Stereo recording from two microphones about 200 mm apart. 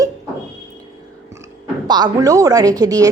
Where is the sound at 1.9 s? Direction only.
20° right (ahead or behind).